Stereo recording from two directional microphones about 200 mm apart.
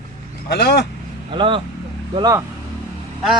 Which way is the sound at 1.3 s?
25° right (ahead or behind).